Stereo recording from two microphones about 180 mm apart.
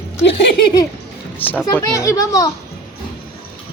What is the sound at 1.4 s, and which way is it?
Speech, 10° left (ahead or behind).